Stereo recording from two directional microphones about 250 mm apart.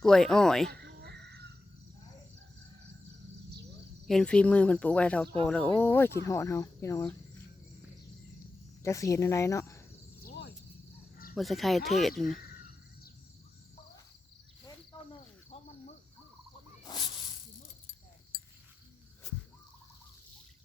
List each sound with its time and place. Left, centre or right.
0.0 s speech: centre
0.7 s a sound: right
4.0 s speech: centre
8.8 s speech: centre
10.2 s cricket: left
11.3 s speech: centre
15.4 s cricket: left
16.8 s snake: centre